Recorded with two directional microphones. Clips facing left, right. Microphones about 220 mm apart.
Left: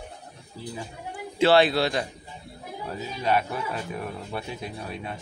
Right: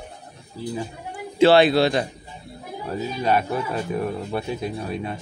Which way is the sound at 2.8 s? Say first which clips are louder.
Right 5 dB; 40° right (ahead or behind).